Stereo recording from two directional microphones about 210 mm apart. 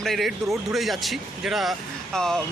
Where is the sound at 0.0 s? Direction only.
Centre (ahead or behind).